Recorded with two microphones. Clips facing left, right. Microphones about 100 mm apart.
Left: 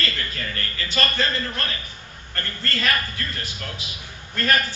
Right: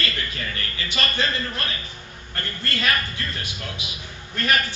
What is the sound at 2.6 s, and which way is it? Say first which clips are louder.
Speech: even; 15° right (ahead or behind).